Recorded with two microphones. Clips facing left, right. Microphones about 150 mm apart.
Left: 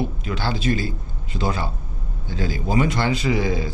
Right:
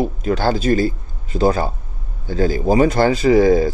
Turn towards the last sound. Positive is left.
turn(degrees=-45)  # may be behind; listen again after turning